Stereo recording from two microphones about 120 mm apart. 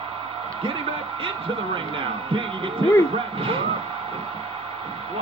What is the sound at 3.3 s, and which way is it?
Speech, 50° right (ahead or behind).